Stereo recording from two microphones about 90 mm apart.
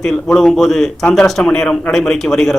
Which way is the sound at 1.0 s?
15° left (ahead or behind).